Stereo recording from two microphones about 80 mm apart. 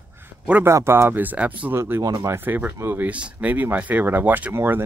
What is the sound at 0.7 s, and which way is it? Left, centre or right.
Speech, right.